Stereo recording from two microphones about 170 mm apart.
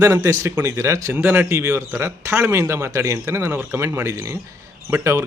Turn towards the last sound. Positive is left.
turn(degrees=-15)  # may be behind; listen again after turning